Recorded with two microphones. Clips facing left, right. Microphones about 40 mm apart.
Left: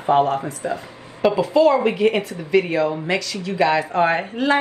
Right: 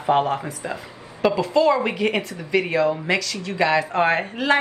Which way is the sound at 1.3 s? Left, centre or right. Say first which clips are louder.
Left 3 dB; centre.